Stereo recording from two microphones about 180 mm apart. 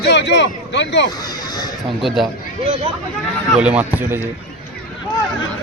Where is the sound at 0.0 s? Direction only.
75° left (ahead or behind).